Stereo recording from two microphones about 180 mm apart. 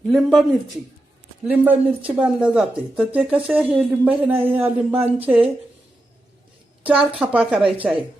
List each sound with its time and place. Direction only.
0.1 s speech: centre (ahead or behind)
1.5 s speech: 10° right (ahead or behind)
6.8 s speech: 5° right (ahead or behind)